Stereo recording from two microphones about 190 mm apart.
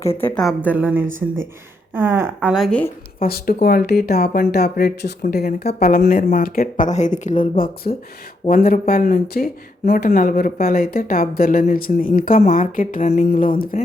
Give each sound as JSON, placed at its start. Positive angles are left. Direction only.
{"t": 0.2, "sound": "a woman's voice", "side_deg": 10}
{"t": 0.4, "sound": "a woman's voice", "side_deg": -10}
{"t": 3.2, "sound": "speech", "side_deg": 50}